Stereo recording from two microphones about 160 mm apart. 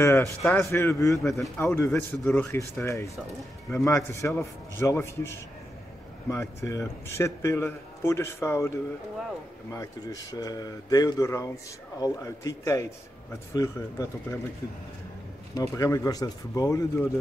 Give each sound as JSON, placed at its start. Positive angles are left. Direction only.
{"t": 0.0, "sound": "a man's voice", "side_deg": 20}
{"t": 1.2, "sound": "speech", "side_deg": 0}
{"t": 1.6, "sound": "a man's voice", "side_deg": 15}
{"t": 15.5, "sound": "speech", "side_deg": 20}